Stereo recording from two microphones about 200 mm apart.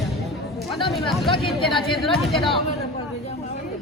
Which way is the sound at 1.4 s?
Centre (ahead or behind).